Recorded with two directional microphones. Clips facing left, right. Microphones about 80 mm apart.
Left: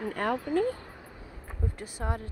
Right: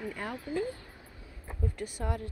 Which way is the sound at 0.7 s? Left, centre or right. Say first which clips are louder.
Left 5 dB; left.